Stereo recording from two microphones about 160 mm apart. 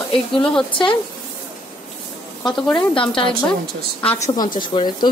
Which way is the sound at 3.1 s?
35° left (ahead or behind).